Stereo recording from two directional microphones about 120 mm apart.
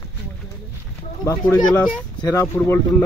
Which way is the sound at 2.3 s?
25° left (ahead or behind).